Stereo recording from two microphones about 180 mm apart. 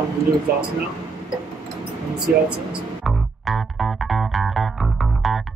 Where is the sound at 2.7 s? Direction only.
Centre (ahead or behind).